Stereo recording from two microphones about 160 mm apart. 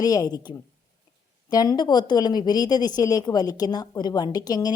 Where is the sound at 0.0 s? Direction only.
25° left (ahead or behind).